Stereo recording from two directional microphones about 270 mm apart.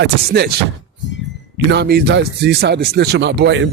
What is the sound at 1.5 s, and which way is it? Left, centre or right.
A man's voice, right.